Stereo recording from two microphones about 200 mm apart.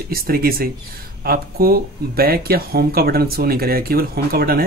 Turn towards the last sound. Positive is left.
turn(degrees=-50)  # may be behind; listen again after turning